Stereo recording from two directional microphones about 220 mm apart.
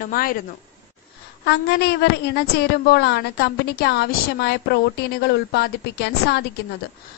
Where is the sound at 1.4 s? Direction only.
50° left (ahead or behind).